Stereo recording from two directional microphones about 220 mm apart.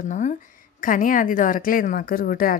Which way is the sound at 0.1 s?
35° left (ahead or behind).